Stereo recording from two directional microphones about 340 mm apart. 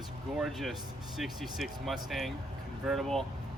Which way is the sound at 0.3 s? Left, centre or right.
Centre.